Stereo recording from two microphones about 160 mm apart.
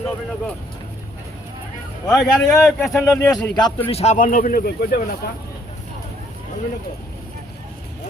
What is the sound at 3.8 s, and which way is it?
Speech, 40° left (ahead or behind).